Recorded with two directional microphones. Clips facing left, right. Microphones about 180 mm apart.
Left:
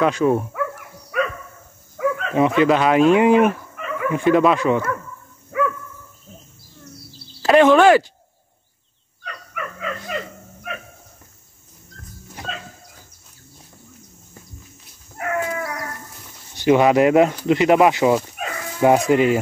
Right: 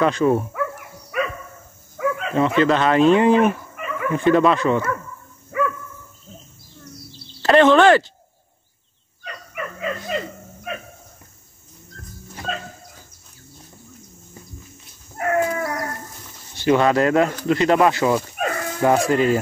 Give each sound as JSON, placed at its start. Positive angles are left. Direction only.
{"t": 0.0, "sound": "speech", "side_deg": 5}
{"t": 1.1, "sound": "dog", "side_deg": -5}
{"t": 2.3, "sound": "speech", "side_deg": 10}
{"t": 5.5, "sound": "dog", "side_deg": 0}
{"t": 6.8, "sound": "a sound", "side_deg": 5}
{"t": 9.2, "sound": "dog", "side_deg": -20}
{"t": 15.1, "sound": "dog", "side_deg": -45}
{"t": 16.5, "sound": "speech", "side_deg": 15}
{"t": 18.4, "sound": "dog", "side_deg": -50}
{"t": 18.8, "sound": "speech", "side_deg": 15}